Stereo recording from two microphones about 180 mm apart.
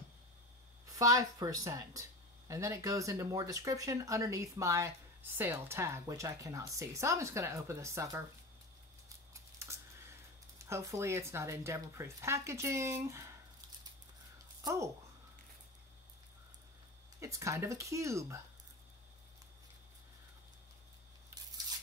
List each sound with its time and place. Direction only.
0.9 s speech: 20° right (ahead or behind)
9.3 s typing: 15° right (ahead or behind)
10.6 s speech: 15° right (ahead or behind)
14.6 s speech: 15° right (ahead or behind)
17.2 s speech: 15° right (ahead or behind)